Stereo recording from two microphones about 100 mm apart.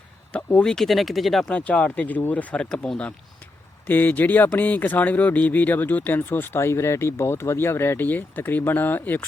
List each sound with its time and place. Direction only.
0.3 s speech: 10° left (ahead or behind)
1.5 s speech: 10° left (ahead or behind)